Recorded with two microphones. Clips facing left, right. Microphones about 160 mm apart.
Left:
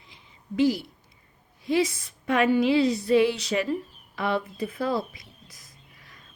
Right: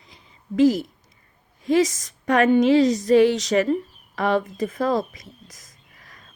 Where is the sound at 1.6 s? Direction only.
40° right (ahead or behind).